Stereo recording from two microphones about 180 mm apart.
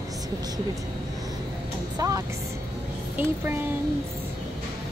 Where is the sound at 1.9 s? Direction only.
20° right (ahead or behind).